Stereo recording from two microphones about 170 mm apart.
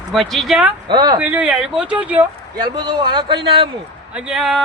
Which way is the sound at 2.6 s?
25° right (ahead or behind).